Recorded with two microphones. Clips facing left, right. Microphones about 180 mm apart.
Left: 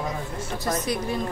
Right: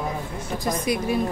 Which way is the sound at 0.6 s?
10° right (ahead or behind).